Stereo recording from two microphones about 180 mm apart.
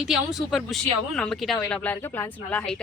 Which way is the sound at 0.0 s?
5° right (ahead or behind).